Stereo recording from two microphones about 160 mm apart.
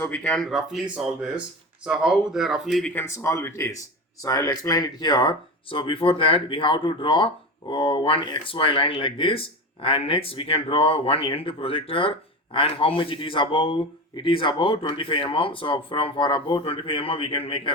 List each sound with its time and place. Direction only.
0.0 s speech: 10° left (ahead or behind)
2.9 s speech: 15° left (ahead or behind); by 17.6 s 35° left (ahead or behind)